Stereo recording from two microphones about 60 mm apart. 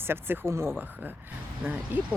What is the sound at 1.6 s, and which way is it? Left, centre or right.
Speech, right.